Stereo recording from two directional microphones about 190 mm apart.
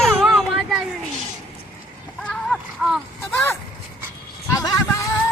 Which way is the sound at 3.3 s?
10° left (ahead or behind).